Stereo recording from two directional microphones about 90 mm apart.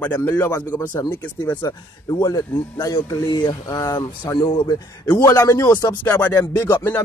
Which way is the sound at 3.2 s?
55° left (ahead or behind).